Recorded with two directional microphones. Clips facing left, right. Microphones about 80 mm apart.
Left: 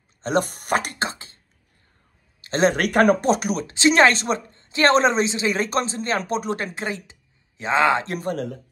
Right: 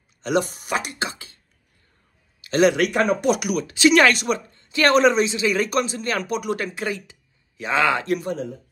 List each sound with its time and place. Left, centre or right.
0.2 s speech: left
1.0 s a sound: left
2.4 s a man's voice: left
2.8 s speech: left
3.2 s a woman's voice: left
8.2 s a man's voice: left